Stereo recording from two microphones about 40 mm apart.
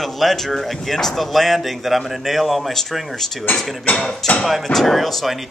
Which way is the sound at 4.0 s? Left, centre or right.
Centre.